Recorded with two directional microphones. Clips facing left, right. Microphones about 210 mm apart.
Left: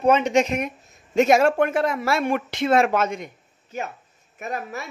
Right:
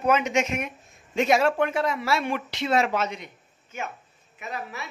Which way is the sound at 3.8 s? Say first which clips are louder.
Left 4 dB; 35° left (ahead or behind).